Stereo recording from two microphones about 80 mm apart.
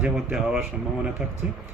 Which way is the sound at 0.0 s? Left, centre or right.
Centre.